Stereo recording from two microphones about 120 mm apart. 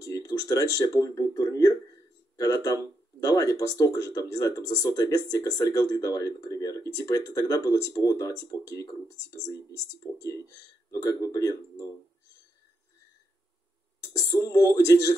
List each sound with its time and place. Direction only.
0.0 s speech: 25° left (ahead or behind)
10.2 s speech: 25° left (ahead or behind)
14.0 s speech: 25° left (ahead or behind)